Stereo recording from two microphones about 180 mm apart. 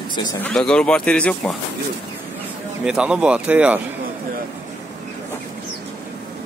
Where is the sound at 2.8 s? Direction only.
5° right (ahead or behind).